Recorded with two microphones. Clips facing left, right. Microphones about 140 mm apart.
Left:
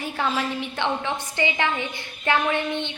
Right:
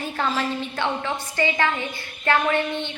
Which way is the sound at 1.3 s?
15° left (ahead or behind).